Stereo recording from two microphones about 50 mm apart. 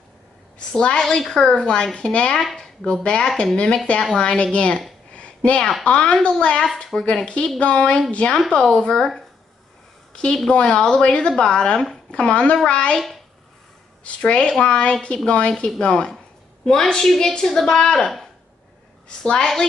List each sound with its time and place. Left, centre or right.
0.7 s a woman's voice: centre
3.3 s a woman's voice: centre
3.5 s a woman's voice: centre
5.1 s a sound: left
5.9 s a woman's voice: left
8.6 s a woman's voice: centre
10.5 s a woman's voice: centre
12.9 s a child's voice: centre
14.0 s a woman's voice: left; by 18.3 s centre
19.0 s a woman's voice: centre